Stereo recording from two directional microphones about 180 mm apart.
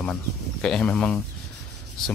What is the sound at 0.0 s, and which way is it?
Speech, 5° left (ahead or behind).